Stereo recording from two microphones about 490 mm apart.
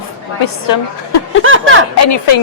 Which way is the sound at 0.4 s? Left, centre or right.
Left.